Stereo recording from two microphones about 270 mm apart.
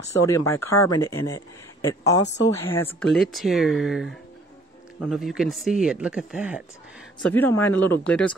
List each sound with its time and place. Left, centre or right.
0.5 s a man's voice: centre
2.2 s a woman's voice: left
2.5 s speech: centre